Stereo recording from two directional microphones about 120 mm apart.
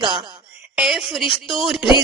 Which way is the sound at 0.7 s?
Centre (ahead or behind).